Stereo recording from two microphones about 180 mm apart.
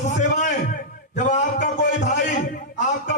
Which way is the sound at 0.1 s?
40° left (ahead or behind).